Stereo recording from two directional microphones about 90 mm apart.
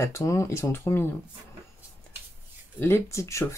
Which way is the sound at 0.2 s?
35° left (ahead or behind).